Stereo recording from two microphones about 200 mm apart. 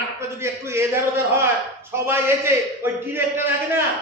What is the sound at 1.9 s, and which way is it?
A man's voice, 10° right (ahead or behind).